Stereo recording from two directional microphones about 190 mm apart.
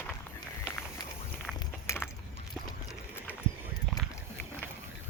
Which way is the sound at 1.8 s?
15° left (ahead or behind).